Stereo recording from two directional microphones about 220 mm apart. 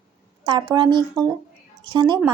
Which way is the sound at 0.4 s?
20° right (ahead or behind).